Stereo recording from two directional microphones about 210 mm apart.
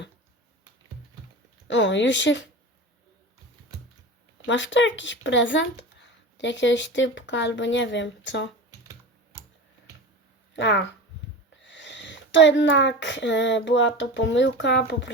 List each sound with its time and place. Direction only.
1.6 s speech: 60° left (ahead or behind)
4.4 s speech: 60° left (ahead or behind)
10.5 s speech: 60° left (ahead or behind)